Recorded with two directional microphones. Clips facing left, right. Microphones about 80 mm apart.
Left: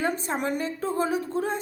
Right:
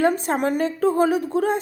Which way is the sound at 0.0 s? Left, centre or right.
Right.